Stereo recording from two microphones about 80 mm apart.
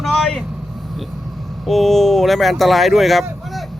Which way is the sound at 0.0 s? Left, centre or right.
Centre.